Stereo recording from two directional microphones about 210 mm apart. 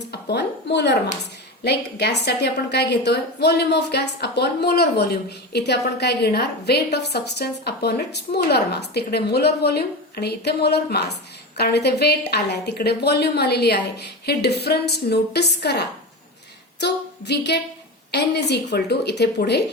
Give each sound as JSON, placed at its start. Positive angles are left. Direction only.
{"t": 0.1, "sound": "a woman's voice", "side_deg": 50}